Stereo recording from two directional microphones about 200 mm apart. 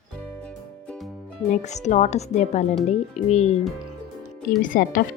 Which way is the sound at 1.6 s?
35° left (ahead or behind).